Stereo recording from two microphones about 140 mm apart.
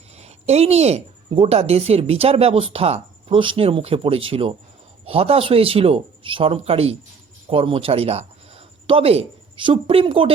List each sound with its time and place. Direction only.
0.2 s a woman's voice: 50° right (ahead or behind)